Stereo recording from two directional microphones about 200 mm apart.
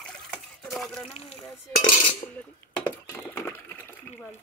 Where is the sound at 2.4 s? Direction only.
5° left (ahead or behind).